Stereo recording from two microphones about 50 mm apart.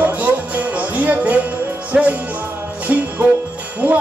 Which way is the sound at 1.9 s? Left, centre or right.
Right.